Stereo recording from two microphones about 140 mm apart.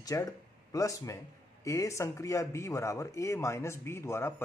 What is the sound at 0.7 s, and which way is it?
Speech, 25° left (ahead or behind).